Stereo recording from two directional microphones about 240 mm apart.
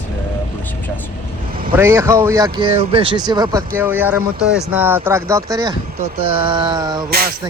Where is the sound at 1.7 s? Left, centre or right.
Centre.